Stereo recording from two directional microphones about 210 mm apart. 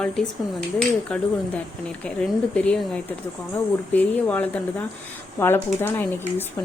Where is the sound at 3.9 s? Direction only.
10° left (ahead or behind).